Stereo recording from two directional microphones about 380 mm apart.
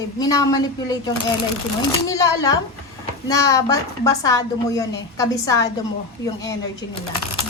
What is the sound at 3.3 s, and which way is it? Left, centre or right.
A woman's voice, centre.